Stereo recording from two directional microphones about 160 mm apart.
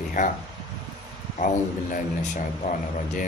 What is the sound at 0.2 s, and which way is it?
Speech, 50° left (ahead or behind).